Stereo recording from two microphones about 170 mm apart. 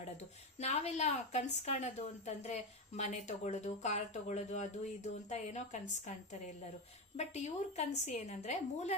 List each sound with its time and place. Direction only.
0.6 s a woman's voice: 40° left (ahead or behind)
7.2 s a woman's voice: 40° left (ahead or behind)